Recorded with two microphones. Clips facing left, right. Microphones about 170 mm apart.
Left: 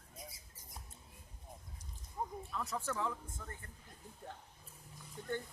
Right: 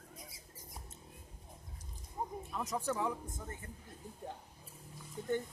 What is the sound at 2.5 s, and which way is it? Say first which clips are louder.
Speech: right 4 dB; 20° right (ahead or behind).